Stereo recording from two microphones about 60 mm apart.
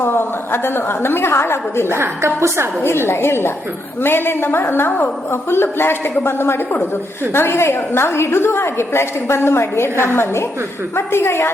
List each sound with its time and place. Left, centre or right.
0.0 s a woman's voice: left
2.0 s a woman's voice: right
2.8 s a woman's voice: left
5.3 s a woman's voice: left